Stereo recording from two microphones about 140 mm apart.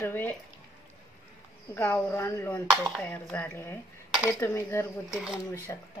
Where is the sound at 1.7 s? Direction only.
15° left (ahead or behind).